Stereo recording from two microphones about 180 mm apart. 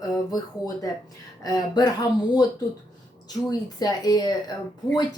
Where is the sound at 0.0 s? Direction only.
20° left (ahead or behind).